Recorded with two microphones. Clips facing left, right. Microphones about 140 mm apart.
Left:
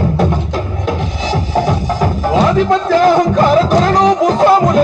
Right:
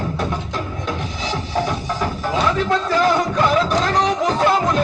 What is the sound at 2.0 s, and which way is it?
Music, 40° left (ahead or behind).